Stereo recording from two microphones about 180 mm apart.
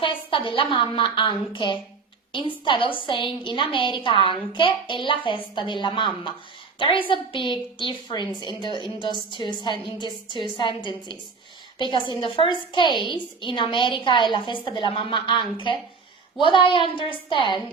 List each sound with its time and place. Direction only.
0.0 s a woman's voice: 30° left (ahead or behind)